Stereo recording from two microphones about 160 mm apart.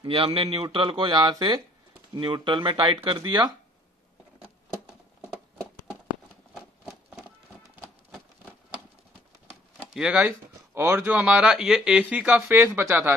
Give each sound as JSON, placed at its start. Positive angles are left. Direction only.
{"t": 0.0, "sound": "speech", "side_deg": -35}
{"t": 6.5, "sound": "a sound", "side_deg": -5}
{"t": 9.9, "sound": "speech", "side_deg": -5}